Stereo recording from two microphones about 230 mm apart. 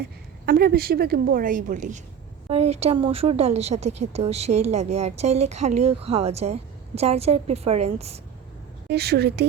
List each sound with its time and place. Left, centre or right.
0.0 s a woman's voice: right
8.9 s a woman's voice: right